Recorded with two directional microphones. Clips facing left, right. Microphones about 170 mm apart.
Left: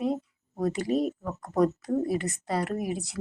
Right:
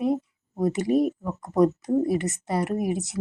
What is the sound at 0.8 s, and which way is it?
Speech, 50° right (ahead or behind).